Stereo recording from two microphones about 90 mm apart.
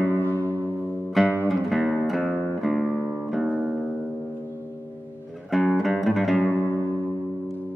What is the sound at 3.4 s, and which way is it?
Music, 20° right (ahead or behind).